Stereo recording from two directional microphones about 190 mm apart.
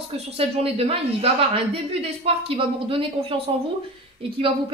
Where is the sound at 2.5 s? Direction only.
30° right (ahead or behind).